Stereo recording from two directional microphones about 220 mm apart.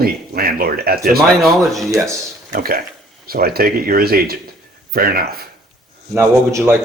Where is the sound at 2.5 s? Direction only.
40° right (ahead or behind).